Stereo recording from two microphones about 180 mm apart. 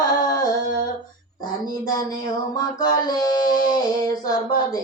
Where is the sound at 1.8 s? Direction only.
20° left (ahead or behind).